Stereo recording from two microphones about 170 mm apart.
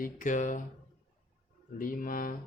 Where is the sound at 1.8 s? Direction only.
55° left (ahead or behind).